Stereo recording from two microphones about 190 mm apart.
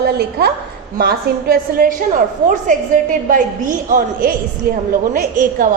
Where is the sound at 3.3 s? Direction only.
45° right (ahead or behind).